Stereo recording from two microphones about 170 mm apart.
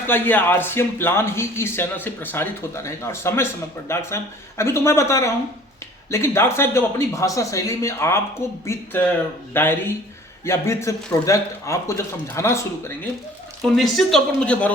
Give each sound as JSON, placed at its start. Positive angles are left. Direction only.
{"t": 0.1, "sound": "speech", "side_deg": 10}
{"t": 13.6, "sound": "speech", "side_deg": 0}